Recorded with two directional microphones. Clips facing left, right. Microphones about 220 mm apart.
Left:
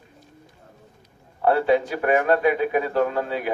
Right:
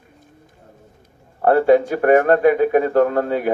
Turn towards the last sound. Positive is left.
turn(degrees=-50)  # may be behind; listen again after turning